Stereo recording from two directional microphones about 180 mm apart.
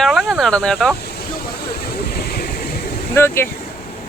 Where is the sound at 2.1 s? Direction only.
60° left (ahead or behind).